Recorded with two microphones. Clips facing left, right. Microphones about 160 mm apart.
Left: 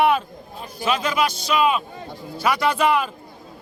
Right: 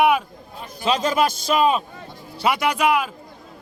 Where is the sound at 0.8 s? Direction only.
40° right (ahead or behind).